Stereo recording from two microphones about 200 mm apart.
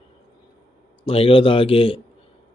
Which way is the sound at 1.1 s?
30° left (ahead or behind).